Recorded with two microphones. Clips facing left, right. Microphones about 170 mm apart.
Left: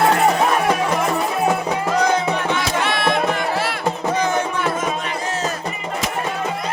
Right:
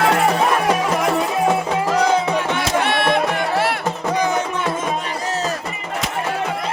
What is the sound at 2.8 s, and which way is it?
Music, 60° right (ahead or behind).